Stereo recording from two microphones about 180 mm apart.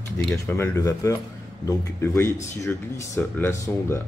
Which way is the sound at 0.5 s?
15° left (ahead or behind).